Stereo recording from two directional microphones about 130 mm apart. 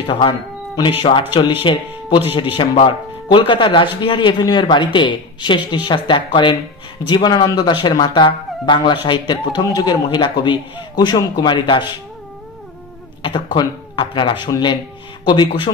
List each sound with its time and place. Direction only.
0.0 s speech: 40° left (ahead or behind)
1.3 s speech: 40° left (ahead or behind)
13.2 s speech: 35° left (ahead or behind)